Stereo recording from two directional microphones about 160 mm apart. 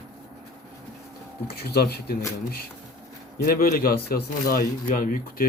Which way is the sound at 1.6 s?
80° left.